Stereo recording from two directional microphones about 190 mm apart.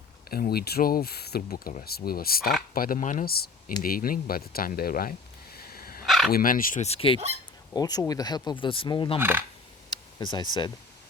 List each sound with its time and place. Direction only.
0.3 s speech: 50° left (ahead or behind)
5.5 s dog: 50° left (ahead or behind)
6.1 s bow-wow: centre (ahead or behind)
6.3 s speech: 50° left (ahead or behind); by 7.2 s 30° left (ahead or behind)
7.7 s speech: 20° left (ahead or behind)
9.1 s speech: 10° right (ahead or behind)
10.2 s speech: 20° left (ahead or behind)